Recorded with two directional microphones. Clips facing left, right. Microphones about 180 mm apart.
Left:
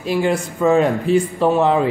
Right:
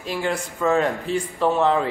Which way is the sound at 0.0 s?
15° left (ahead or behind).